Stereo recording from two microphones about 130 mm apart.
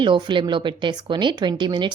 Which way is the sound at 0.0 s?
40° right (ahead or behind).